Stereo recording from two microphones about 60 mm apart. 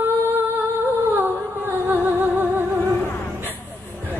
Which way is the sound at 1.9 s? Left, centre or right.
Right.